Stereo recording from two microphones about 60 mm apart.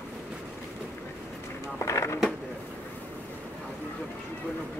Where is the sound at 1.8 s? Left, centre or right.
Left.